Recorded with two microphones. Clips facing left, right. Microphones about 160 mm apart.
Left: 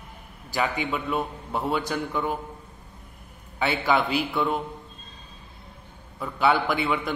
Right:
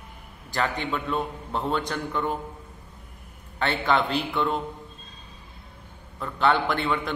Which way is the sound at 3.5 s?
5° left (ahead or behind).